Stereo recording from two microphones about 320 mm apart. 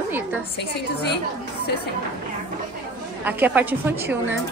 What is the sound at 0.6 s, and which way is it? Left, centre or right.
Speech, left.